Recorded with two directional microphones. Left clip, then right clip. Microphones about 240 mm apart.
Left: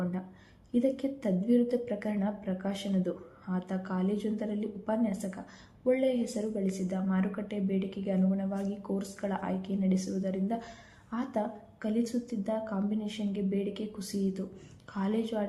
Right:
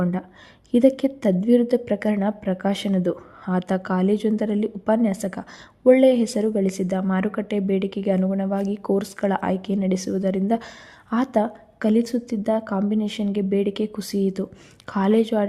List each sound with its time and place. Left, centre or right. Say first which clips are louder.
0.0 s a woman's voice: right 11 dB; right